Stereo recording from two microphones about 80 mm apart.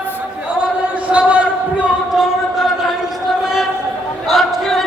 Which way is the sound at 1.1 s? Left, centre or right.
Centre.